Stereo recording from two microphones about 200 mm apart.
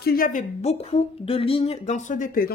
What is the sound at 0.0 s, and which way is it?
Speech, 45° left (ahead or behind).